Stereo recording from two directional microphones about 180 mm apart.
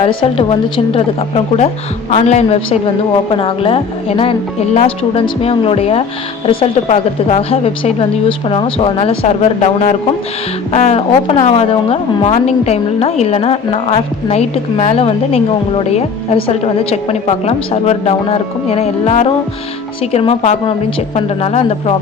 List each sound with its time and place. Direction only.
0.0 s a woman's voice: 30° left (ahead or behind)
1.5 s a woman's voice: 40° left (ahead or behind)